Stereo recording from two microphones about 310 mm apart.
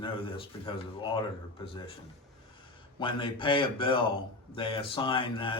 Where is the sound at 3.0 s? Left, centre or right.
Centre.